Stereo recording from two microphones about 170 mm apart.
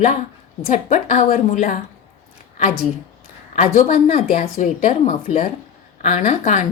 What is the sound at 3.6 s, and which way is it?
A woman's voice, 45° left (ahead or behind).